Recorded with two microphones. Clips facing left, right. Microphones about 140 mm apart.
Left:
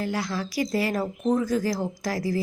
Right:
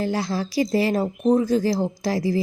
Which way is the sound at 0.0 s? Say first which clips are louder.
Right 4 dB; 30° right (ahead or behind).